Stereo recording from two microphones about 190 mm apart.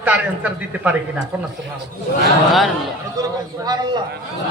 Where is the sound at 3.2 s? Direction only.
20° right (ahead or behind).